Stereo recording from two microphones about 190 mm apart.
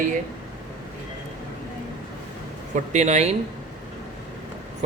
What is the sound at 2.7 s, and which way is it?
Speech, 35° right (ahead or behind).